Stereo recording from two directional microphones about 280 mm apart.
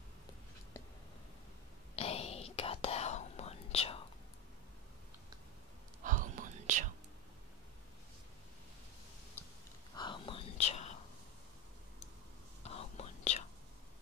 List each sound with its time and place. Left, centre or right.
2.0 s whispering: left
6.0 s whispering: right
9.9 s whispering: centre
12.6 s whispering: left